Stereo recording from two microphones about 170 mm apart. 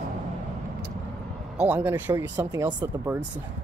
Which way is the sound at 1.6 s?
10° right (ahead or behind).